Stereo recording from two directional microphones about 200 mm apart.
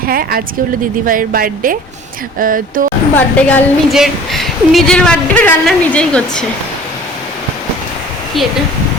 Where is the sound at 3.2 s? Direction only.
10° left (ahead or behind).